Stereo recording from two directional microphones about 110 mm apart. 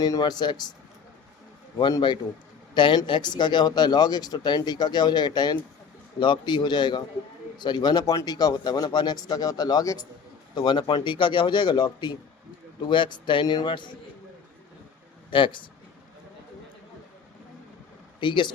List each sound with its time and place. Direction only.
0.0 s speech: 35° left (ahead or behind)
2.7 s speech: 40° left (ahead or behind)
15.3 s speech: 50° left (ahead or behind)
18.2 s speech: 45° left (ahead or behind)